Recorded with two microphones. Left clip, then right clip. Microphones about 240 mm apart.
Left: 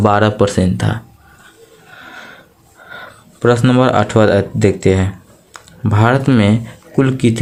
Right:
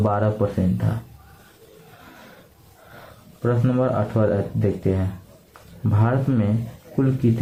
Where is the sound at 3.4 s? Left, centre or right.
Left.